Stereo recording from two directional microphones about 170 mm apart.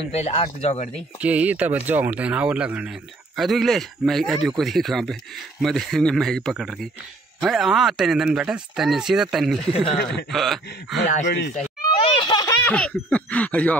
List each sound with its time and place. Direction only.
0.1 s speech: 35° left (ahead or behind)
1.2 s speech: 10° right (ahead or behind)
11.2 s speech: 75° left (ahead or behind)
11.5 s a sound: 45° left (ahead or behind)
12.3 s baby laughter: 25° left (ahead or behind)
12.6 s speech: 5° left (ahead or behind)